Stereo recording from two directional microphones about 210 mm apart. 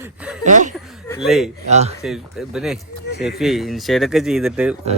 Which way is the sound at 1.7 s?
30° right (ahead or behind).